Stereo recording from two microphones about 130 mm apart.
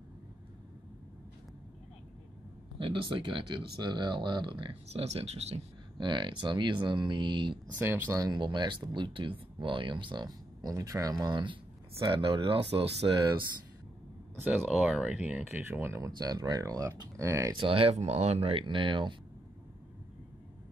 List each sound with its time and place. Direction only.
2.8 s speech: 40° right (ahead or behind)
4.8 s speech: 55° right (ahead or behind)
5.9 s speech: 40° right (ahead or behind)
14.3 s speech: 15° right (ahead or behind)
16.2 s speech: 30° right (ahead or behind)
17.6 s speech: 45° right (ahead or behind)